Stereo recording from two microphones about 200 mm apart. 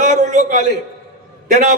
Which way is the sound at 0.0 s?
35° right (ahead or behind).